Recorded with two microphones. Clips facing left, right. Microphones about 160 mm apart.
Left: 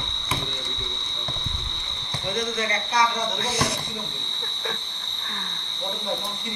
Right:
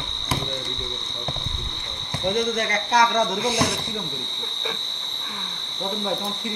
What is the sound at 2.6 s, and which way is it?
Speech, 65° right (ahead or behind).